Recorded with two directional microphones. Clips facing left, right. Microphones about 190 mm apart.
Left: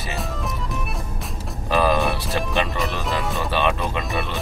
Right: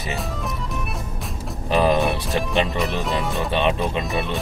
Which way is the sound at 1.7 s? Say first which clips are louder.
Right 1 dB; 20° right (ahead or behind).